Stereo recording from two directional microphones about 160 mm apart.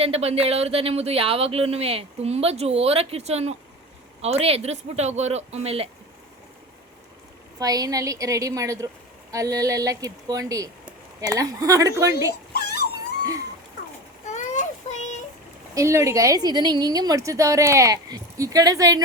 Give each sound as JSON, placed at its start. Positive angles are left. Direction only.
{"t": 0.0, "sound": "speech", "side_deg": -40}
{"t": 7.6, "sound": "a woman's voice", "side_deg": -20}
{"t": 12.3, "sound": "dog", "side_deg": 85}
{"t": 14.3, "sound": "child singing", "side_deg": 50}
{"t": 15.7, "sound": "a woman's voice", "side_deg": -20}